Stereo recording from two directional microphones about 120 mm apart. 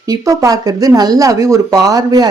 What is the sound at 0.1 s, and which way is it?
Speech, 30° right (ahead or behind).